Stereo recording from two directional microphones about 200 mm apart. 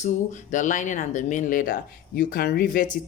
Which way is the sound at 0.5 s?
40° left (ahead or behind).